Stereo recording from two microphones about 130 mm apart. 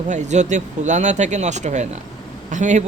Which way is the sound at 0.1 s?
65° right (ahead or behind).